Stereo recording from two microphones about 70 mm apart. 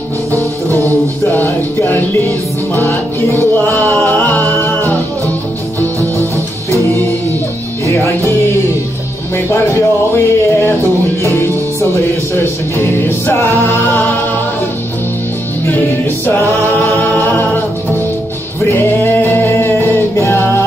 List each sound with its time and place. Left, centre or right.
0.7 s music: left
5.9 s music: right
7.8 s music: left
9.5 s speech: left
13.7 s music: left
18.6 s music: left